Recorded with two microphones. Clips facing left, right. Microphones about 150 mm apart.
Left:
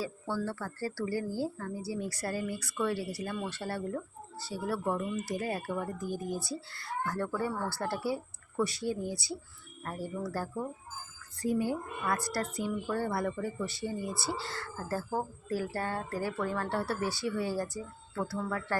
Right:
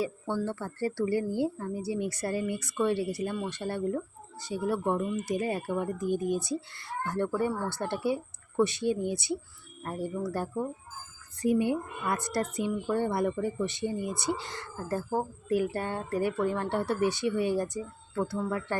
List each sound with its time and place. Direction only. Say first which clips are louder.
0.0 s speech: right 4 dB; 20° right (ahead or behind)